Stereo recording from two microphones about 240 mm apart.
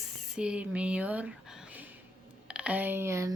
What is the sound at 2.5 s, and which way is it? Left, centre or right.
Speech, centre.